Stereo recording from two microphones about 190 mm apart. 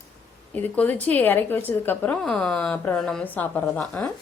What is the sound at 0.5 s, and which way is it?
A woman's voice, 10° left (ahead or behind).